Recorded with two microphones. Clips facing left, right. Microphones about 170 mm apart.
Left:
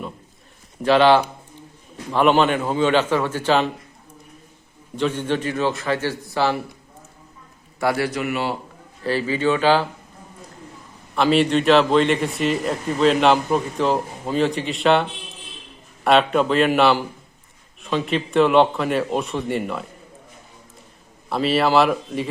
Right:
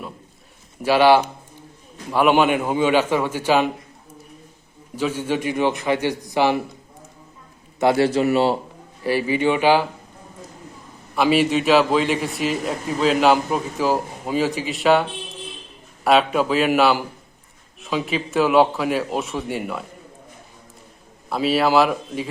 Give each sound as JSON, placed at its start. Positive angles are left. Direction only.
{"t": 0.8, "sound": "a man's voice", "side_deg": -10}
{"t": 4.9, "sound": "a man's voice", "side_deg": -10}
{"t": 7.8, "sound": "a man's voice", "side_deg": -25}
{"t": 9.0, "sound": "a man's voice", "side_deg": -15}
{"t": 11.1, "sound": "a man's voice", "side_deg": -5}
{"t": 16.0, "sound": "a man's voice", "side_deg": -5}
{"t": 21.2, "sound": "a man's voice", "side_deg": 0}